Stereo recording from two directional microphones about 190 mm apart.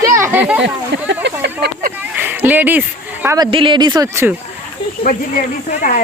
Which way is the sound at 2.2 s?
10° right (ahead or behind).